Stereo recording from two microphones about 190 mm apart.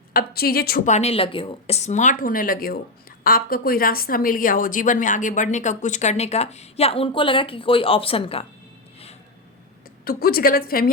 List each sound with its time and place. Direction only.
0.1 s a woman's voice: 50° left (ahead or behind)
0.9 s a woman's voice: 35° left (ahead or behind)
10.0 s a woman's voice: 50° left (ahead or behind)